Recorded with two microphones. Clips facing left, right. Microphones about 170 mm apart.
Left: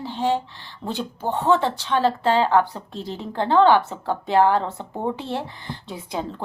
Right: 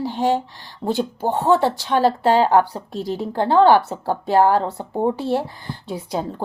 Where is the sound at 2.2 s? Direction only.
40° right (ahead or behind).